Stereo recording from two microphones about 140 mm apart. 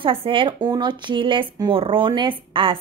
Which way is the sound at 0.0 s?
40° right (ahead or behind).